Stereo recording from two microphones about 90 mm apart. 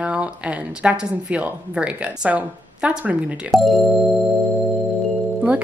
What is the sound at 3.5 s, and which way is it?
Speech, centre (ahead or behind).